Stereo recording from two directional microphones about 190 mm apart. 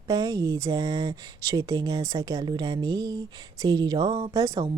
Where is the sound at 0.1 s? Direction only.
20° right (ahead or behind).